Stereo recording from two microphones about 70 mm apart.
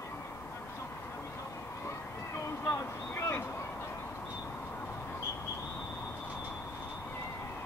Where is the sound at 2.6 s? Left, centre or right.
Left.